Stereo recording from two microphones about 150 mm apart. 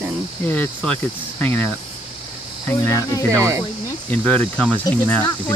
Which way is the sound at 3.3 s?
20° right (ahead or behind).